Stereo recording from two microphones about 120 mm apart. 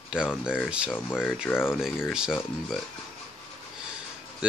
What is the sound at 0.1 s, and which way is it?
Speech, 5° right (ahead or behind).